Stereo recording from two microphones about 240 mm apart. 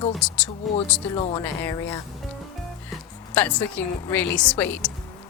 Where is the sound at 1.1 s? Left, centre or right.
Left.